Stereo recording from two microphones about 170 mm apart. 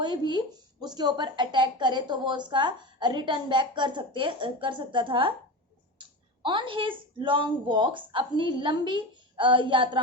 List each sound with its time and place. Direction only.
0.0 s speech: 25° right (ahead or behind)